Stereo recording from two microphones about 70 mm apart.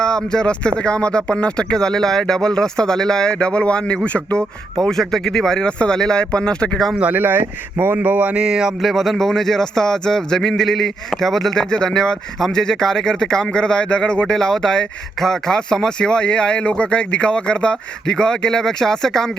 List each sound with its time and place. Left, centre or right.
0.3 s a man's voice: centre
7.0 s a man's voice: right; by 19.3 s centre